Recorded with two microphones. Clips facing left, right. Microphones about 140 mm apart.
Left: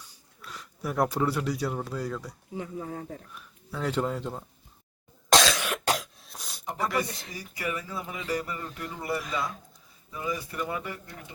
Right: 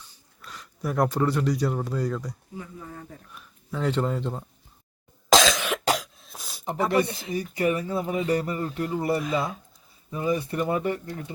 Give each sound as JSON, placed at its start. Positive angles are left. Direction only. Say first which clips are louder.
{"t": 0.1, "sound": "speech", "louder": "left 1 dB", "side_deg": 5}
{"t": 2.6, "sound": "speech", "louder": "left 7 dB", "side_deg": 50}
{"t": 3.3, "sound": "speech", "louder": "right 4 dB", "side_deg": 5}
{"t": 5.3, "sound": "cough", "louder": "right 3 dB", "side_deg": 0}
{"t": 6.7, "sound": "speech", "louder": "right 6 dB", "side_deg": -25}
{"t": 7.1, "sound": "speech", "louder": "right 7 dB", "side_deg": -5}
{"t": 7.5, "sound": "speech", "louder": "right 8 dB", "side_deg": -30}